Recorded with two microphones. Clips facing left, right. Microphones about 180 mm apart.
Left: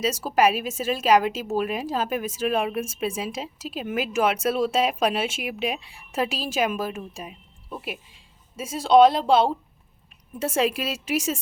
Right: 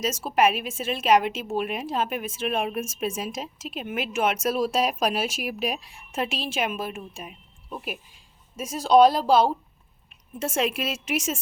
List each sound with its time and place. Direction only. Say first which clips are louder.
0.0 s a woman's voice: left 1 dB; 35° left (ahead or behind)
6.1 s a woman's voice: left 2 dB; 35° left (ahead or behind)
8.5 s a woman's voice: left 1 dB; 25° left (ahead or behind)